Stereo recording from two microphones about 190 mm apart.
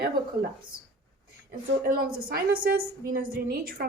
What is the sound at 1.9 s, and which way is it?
A woman's voice, 50° right (ahead or behind).